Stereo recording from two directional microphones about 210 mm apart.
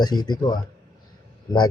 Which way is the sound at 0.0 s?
20° left (ahead or behind).